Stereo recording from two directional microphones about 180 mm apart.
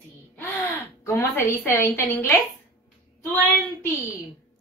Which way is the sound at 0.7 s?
15° left (ahead or behind).